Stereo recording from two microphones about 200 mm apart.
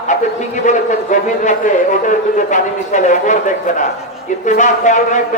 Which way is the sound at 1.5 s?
40° left (ahead or behind).